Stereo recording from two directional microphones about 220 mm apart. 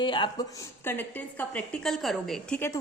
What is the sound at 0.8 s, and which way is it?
A woman's voice, 10° left (ahead or behind).